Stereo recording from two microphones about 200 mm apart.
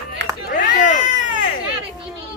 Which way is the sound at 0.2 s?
60° right (ahead or behind).